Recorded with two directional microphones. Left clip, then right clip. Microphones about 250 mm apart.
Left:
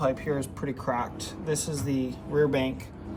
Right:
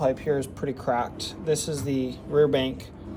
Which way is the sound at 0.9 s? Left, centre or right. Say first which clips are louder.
Right 4 dB; centre.